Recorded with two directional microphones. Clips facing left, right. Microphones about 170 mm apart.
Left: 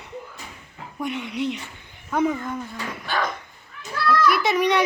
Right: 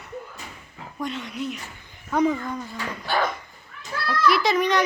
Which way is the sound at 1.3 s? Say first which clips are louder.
Left 6 dB; 75° left (ahead or behind).